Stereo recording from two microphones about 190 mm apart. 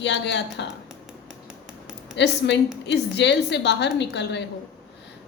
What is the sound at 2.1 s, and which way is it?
A woman's voice, 65° left (ahead or behind).